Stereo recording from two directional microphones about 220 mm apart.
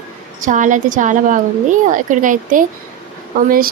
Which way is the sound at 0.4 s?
35° right (ahead or behind).